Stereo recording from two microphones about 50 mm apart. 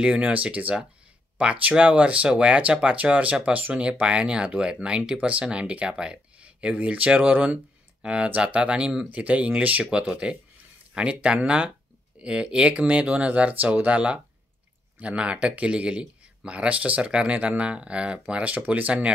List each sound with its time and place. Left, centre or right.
0.0 s speech: right
9.2 s speech: right
9.8 s speech: centre